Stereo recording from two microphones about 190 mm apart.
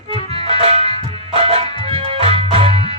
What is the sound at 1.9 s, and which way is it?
Music, 30° right (ahead or behind).